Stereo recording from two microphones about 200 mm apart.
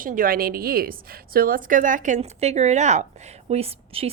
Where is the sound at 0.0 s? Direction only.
45° right (ahead or behind).